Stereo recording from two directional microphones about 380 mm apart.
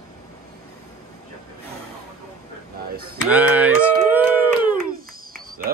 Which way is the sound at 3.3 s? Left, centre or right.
Centre.